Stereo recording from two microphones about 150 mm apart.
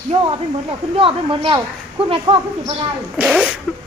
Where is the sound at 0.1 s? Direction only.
35° right (ahead or behind).